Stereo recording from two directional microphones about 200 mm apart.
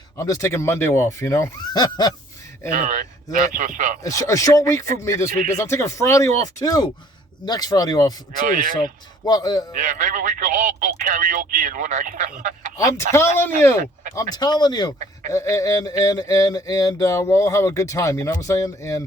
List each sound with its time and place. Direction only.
0.2 s speech: 15° left (ahead or behind)
2.7 s speech: 40° right (ahead or behind)
4.0 s speech: 15° left (ahead or behind)
8.4 s speech: 40° right (ahead or behind)
9.2 s speech: 20° left (ahead or behind)
9.7 s speech: 40° right (ahead or behind)
12.7 s speech: 15° left (ahead or behind)